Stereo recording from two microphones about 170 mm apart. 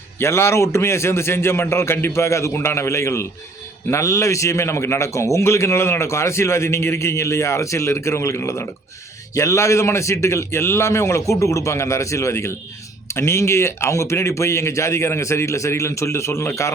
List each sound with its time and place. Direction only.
0.2 s a man's voice: 15° left (ahead or behind)